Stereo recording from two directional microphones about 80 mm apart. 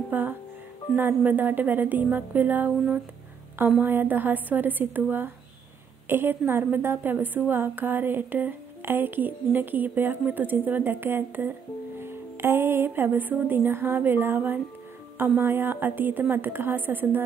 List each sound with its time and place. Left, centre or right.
0.1 s a woman's voice: right
6.0 s a woman's voice: right